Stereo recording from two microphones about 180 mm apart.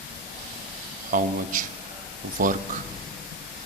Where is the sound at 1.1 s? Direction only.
50° right (ahead or behind).